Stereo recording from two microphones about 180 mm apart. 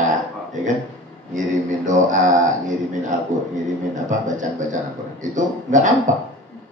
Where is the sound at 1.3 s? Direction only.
45° right (ahead or behind).